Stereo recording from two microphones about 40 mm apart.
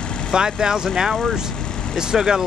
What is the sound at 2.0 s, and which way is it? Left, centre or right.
Speech, centre.